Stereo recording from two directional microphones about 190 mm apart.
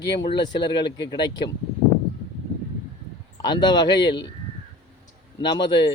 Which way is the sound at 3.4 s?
20° left (ahead or behind).